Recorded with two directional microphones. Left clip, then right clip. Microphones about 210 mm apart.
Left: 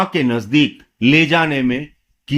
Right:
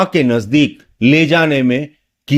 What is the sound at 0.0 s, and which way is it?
Speech, 20° right (ahead or behind).